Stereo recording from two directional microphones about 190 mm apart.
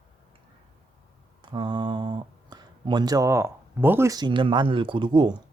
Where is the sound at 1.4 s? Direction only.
25° right (ahead or behind).